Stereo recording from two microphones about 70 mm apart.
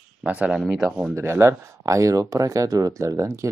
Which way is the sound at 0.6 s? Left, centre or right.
Centre.